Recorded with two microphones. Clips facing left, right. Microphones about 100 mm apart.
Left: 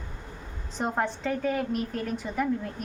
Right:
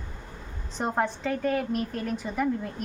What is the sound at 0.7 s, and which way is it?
A woman's voice, centre (ahead or behind).